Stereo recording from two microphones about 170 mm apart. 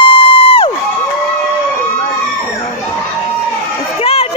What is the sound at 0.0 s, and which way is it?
Crowd, 30° left (ahead or behind).